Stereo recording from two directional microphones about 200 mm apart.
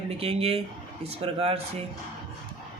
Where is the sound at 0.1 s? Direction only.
30° right (ahead or behind).